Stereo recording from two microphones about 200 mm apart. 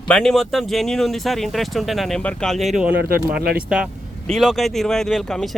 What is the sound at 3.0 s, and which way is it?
Speech, 50° right (ahead or behind).